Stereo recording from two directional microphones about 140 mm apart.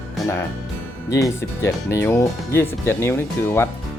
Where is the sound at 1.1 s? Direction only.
20° left (ahead or behind).